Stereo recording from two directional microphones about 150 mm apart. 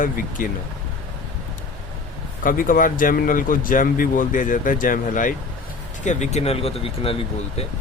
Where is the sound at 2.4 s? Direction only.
65° left (ahead or behind).